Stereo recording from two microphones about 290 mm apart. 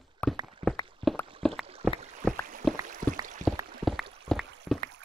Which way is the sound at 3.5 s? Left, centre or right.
Centre.